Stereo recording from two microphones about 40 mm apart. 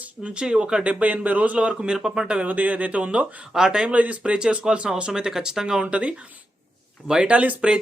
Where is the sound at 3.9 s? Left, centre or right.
Right.